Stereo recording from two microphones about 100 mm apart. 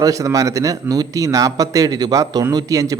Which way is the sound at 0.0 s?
35° right (ahead or behind).